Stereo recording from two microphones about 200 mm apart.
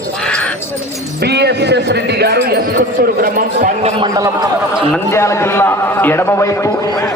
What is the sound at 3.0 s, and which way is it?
Speech, 40° right (ahead or behind).